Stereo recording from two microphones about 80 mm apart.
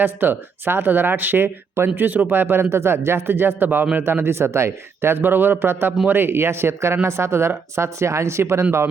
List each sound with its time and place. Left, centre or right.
0.0 s speech: right